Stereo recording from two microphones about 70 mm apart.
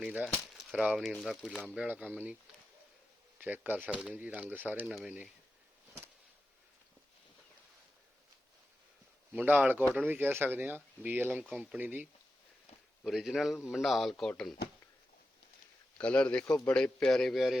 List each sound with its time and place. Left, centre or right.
0.0 s speech: centre
1.2 s speech: centre
3.4 s speech: right
9.3 s speech: right
13.1 s speech: centre
16.0 s speech: centre